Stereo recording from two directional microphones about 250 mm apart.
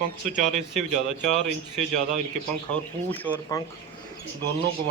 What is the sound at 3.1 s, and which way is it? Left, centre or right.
Speech, centre.